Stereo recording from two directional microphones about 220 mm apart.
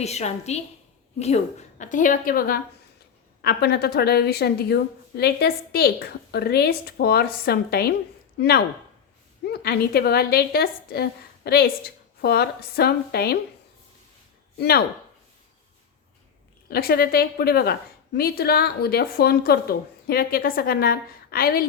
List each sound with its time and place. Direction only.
0.0 s a woman's voice: 30° left (ahead or behind); by 13.4 s 45° left (ahead or behind)
14.6 s a woman's voice: 45° left (ahead or behind)
16.6 s a woman's voice: 45° left (ahead or behind)